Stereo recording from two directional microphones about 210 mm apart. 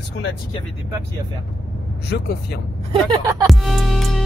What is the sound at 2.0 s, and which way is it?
Speech, 50° left (ahead or behind).